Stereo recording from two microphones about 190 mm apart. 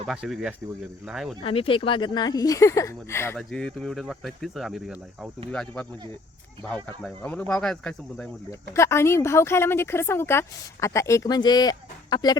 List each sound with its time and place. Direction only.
0.0 s speech: centre (ahead or behind)
1.5 s speech: 30° left (ahead or behind); by 5.9 s 5° left (ahead or behind)
7.0 s speech: 10° left (ahead or behind)
8.7 s speech: 15° left (ahead or behind)